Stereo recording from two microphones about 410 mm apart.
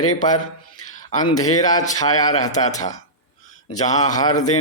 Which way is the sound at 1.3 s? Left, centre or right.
Centre.